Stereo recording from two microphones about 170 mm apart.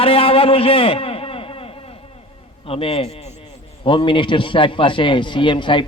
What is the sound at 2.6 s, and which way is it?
A man's voice, 35° left (ahead or behind).